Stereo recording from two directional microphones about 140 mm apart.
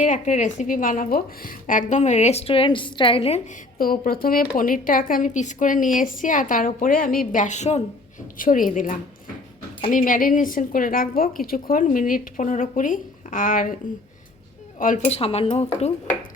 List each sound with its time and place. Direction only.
0.0 s a woman's voice: 60° left (ahead or behind); by 3.4 s 45° left (ahead or behind)
3.8 s a woman's voice: 90° left; by 7.8 s 55° left (ahead or behind)
8.4 s a woman's voice: 75° left (ahead or behind)
15.0 s speech: 45° left (ahead or behind)